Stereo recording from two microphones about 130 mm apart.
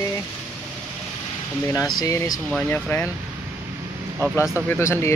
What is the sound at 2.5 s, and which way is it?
Speech, 5° left (ahead or behind).